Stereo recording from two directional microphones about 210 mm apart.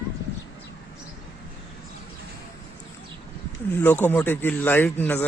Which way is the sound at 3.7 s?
10° left (ahead or behind).